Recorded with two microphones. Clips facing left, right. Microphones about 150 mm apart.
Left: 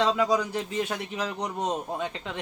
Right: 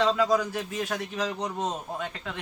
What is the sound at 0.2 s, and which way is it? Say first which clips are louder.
A man's voice: even; 20° left (ahead or behind).